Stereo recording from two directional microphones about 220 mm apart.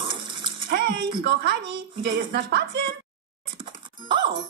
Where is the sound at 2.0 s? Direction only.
50° right (ahead or behind).